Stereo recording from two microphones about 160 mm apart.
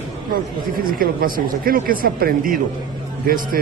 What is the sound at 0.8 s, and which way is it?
A man's voice, 65° right (ahead or behind).